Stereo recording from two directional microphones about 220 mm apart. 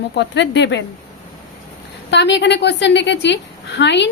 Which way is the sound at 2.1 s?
50° left (ahead or behind).